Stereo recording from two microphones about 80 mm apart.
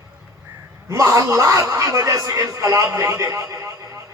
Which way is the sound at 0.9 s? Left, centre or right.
Right.